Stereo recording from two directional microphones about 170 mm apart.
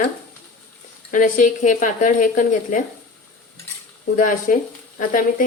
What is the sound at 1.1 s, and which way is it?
Speech, 50° left (ahead or behind).